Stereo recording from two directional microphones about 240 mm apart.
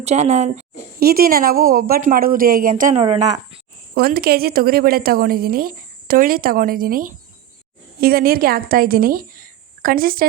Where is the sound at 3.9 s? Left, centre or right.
Right.